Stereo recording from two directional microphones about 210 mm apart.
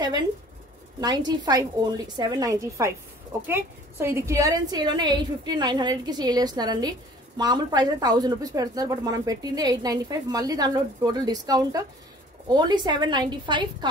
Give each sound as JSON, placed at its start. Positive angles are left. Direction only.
{"t": 1.0, "sound": "a woman's voice", "side_deg": -20}